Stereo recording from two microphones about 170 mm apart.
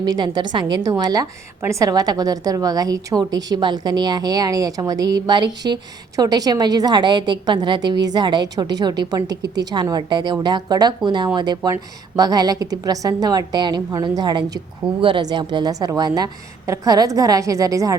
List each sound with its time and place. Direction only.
0.0 s a woman's voice: 25° right (ahead or behind)